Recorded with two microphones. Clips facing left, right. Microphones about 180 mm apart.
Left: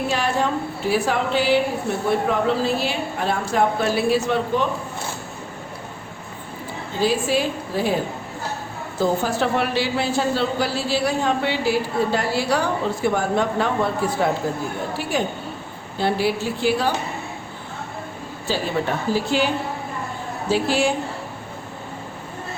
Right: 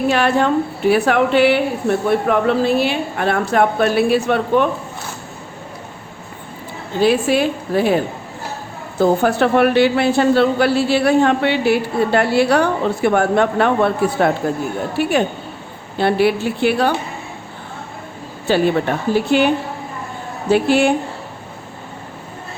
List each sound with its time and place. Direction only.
0.1 s a woman's voice: 65° right (ahead or behind)
7.0 s a woman's voice: 65° right (ahead or behind)
18.5 s a woman's voice: 60° right (ahead or behind)